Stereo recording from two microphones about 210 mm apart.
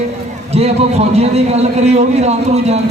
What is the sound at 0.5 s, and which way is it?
A man's voice, 30° right (ahead or behind).